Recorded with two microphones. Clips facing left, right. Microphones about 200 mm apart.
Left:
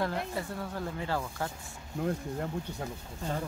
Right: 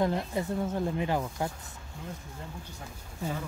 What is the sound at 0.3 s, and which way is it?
Speech, 20° right (ahead or behind).